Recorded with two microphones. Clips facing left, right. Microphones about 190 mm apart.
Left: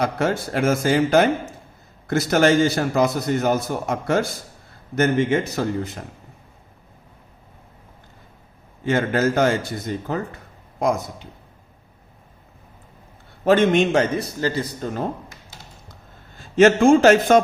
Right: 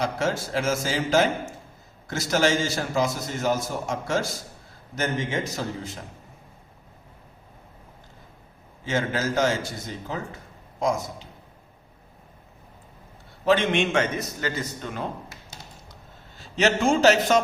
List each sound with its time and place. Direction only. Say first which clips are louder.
0.0 s a man's voice: left 4 dB; 60° left (ahead or behind)
8.8 s a man's voice: left 6 dB; 55° left (ahead or behind)
13.4 s a man's voice: left 5 dB; 50° left (ahead or behind)
16.4 s a man's voice: left 8 dB; 50° left (ahead or behind)